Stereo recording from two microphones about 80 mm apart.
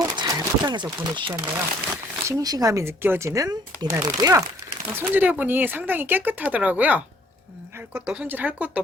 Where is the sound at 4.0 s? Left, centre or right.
Right.